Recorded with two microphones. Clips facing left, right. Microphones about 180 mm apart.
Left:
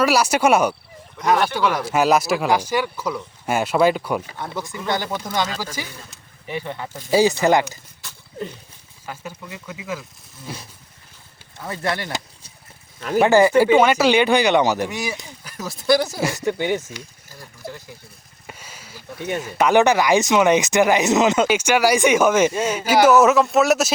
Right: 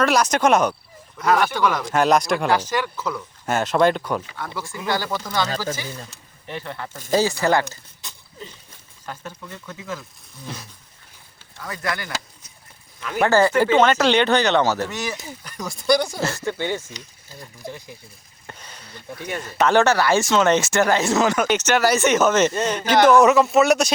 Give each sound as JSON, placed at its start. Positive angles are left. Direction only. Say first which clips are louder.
{"t": 0.0, "sound": "speech", "louder": "left 1 dB", "side_deg": 10}
{"t": 4.4, "sound": "speech", "louder": "left 2 dB", "side_deg": 20}
{"t": 6.5, "sound": "speech", "louder": "left 3 dB", "side_deg": 15}
{"t": 8.0, "sound": "a sound", "louder": "even", "side_deg": -20}
{"t": 9.0, "sound": "speech", "louder": "left 1 dB", "side_deg": 10}
{"t": 11.6, "sound": "speech", "louder": "left 3 dB", "side_deg": 25}
{"t": 13.0, "sound": "speech", "louder": "left 6 dB", "side_deg": 40}
{"t": 13.2, "sound": "speech", "louder": "left 3 dB", "side_deg": 15}
{"t": 18.4, "sound": "speech", "louder": "left 1 dB", "side_deg": 10}